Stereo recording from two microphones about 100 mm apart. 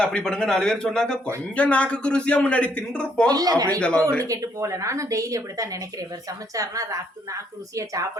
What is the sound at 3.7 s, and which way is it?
Speech, 10° left (ahead or behind).